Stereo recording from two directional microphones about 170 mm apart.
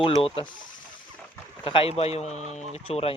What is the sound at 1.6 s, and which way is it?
Speech, 30° left (ahead or behind).